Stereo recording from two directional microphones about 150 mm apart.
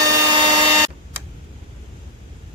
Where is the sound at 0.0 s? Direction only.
30° right (ahead or behind).